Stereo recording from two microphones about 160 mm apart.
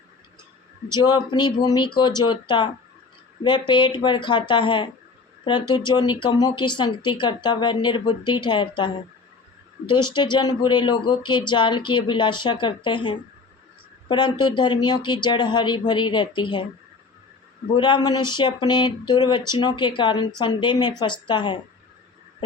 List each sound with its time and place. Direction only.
0.9 s speech: 25° left (ahead or behind)
17.7 s speech: 30° left (ahead or behind)